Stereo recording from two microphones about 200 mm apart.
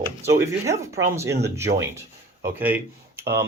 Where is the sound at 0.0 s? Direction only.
15° right (ahead or behind).